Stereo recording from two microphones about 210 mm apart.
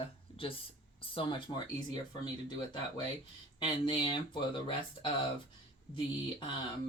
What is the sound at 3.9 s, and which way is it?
Speech, 25° left (ahead or behind).